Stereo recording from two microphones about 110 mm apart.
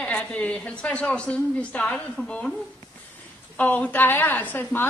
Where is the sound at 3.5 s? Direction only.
15° left (ahead or behind).